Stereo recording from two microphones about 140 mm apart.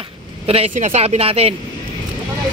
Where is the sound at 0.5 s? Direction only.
55° right (ahead or behind).